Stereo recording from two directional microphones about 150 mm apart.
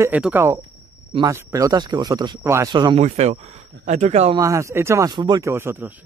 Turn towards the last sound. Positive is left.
turn(degrees=-15)  # may be behind; listen again after turning